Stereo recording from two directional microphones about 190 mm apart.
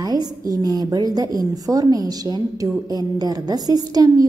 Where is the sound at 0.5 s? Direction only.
20° right (ahead or behind).